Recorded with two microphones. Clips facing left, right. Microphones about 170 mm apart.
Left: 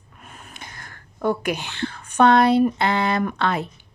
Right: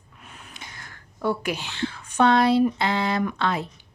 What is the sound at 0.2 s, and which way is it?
A woman's voice, 50° left (ahead or behind).